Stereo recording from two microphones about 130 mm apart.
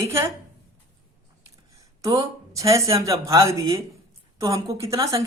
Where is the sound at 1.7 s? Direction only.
25° right (ahead or behind).